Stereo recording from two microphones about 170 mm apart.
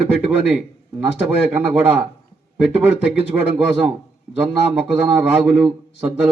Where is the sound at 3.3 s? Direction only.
15° right (ahead or behind).